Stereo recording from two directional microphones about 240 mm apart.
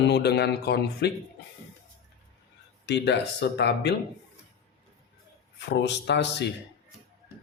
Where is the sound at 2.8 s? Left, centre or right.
Left.